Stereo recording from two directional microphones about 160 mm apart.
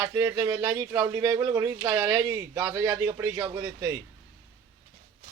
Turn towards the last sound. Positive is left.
turn(degrees=-20)  # may be behind; listen again after turning